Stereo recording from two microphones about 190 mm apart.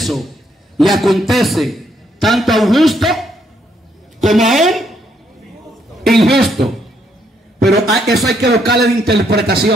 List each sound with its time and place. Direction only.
0.0 s a man's voice: centre (ahead or behind)
6.0 s a man's voice: centre (ahead or behind)
7.9 s a woman's voice: centre (ahead or behind)
8.4 s a man's voice: 60° right (ahead or behind)